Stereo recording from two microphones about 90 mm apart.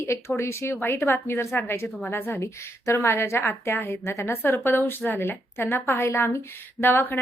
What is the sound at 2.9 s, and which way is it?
Speech, 30° left (ahead or behind).